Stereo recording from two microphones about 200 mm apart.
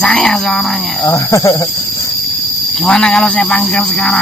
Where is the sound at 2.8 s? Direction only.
5° left (ahead or behind).